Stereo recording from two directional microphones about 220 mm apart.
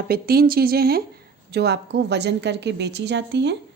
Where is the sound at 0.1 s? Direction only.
45° right (ahead or behind).